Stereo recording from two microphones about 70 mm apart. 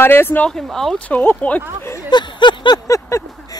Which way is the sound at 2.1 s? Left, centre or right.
Left.